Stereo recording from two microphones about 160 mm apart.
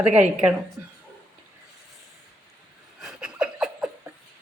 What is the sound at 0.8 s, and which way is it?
Speech, 10° right (ahead or behind).